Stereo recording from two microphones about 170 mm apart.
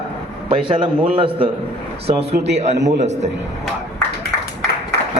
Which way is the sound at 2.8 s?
90° right.